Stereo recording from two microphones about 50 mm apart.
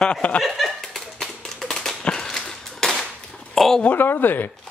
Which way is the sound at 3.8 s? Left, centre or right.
Left.